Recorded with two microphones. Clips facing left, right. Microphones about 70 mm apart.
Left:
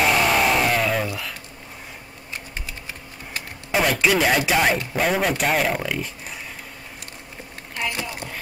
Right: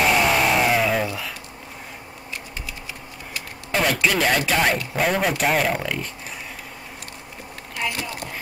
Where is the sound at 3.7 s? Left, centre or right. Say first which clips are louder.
Left 1 dB; centre.